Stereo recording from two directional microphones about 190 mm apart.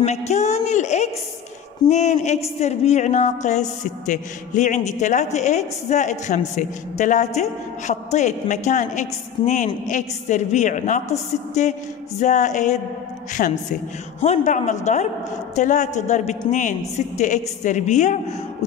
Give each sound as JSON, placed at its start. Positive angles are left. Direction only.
{"t": 0.0, "sound": "a woman's voice", "side_deg": 35}
{"t": 14.2, "sound": "a woman's voice", "side_deg": 35}